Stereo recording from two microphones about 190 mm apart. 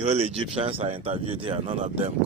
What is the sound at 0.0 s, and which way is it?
Speech, 35° right (ahead or behind).